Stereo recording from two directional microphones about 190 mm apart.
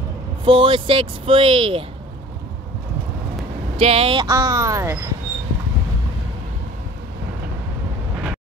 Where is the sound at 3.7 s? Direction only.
30° right (ahead or behind); by 4.9 s 15° right (ahead or behind).